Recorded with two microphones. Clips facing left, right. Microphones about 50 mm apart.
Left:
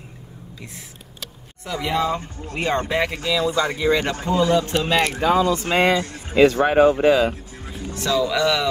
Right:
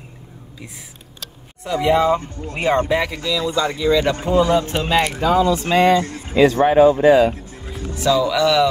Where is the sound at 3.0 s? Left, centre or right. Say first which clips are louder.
Even; centre.